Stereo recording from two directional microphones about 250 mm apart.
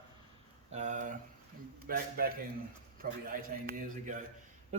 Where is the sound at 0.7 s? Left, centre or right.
Right.